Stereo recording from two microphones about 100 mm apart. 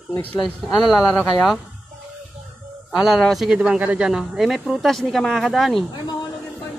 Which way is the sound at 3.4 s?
10° right (ahead or behind).